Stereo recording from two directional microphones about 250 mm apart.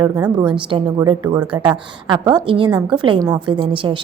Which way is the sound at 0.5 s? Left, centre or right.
Centre.